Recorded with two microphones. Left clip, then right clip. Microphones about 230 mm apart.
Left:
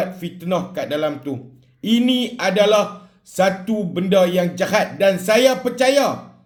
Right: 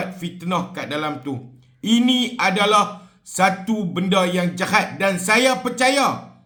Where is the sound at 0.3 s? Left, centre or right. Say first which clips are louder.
Left 2 dB; centre.